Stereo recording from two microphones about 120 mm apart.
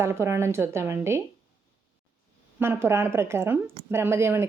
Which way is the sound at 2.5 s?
20° right (ahead or behind).